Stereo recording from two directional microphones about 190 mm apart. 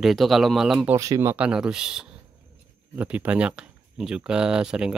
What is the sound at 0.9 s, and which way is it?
Speech, 15° right (ahead or behind).